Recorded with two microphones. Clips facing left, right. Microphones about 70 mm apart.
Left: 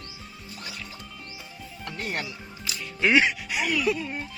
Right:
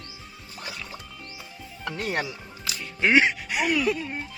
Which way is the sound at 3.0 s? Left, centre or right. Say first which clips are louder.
Right 1 dB; right.